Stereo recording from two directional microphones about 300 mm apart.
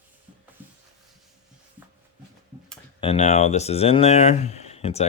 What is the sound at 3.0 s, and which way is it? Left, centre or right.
Speech, left.